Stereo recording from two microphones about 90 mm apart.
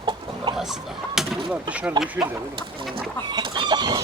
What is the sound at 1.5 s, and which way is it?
Speech, 15° right (ahead or behind).